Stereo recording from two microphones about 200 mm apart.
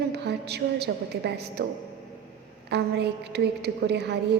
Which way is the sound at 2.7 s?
55° right (ahead or behind).